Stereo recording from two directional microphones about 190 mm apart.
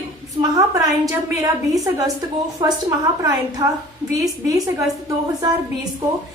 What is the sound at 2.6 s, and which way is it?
A woman's voice, 20° right (ahead or behind).